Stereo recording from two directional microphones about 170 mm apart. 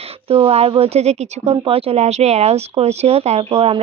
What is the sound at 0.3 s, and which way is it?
Speech, 35° right (ahead or behind).